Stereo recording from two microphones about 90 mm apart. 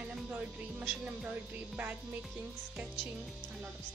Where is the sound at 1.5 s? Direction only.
20° right (ahead or behind).